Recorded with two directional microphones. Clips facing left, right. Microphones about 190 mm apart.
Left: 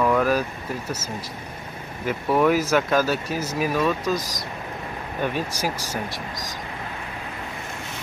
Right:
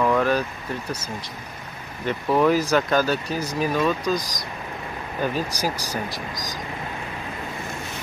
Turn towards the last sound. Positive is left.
turn(degrees=0)  # may be behind; listen again after turning